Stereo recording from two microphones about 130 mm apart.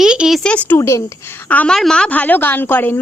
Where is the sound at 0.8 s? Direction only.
20° left (ahead or behind).